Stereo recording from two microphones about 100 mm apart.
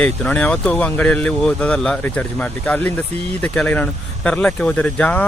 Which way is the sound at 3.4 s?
10° left (ahead or behind).